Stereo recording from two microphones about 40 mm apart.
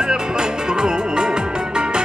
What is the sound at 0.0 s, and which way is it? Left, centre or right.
Music, centre.